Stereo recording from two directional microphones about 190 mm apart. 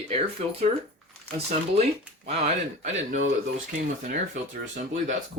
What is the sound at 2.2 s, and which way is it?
Speech, 35° right (ahead or behind).